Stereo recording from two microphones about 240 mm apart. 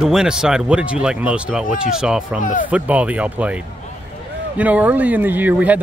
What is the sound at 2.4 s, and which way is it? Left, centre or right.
Speech, left.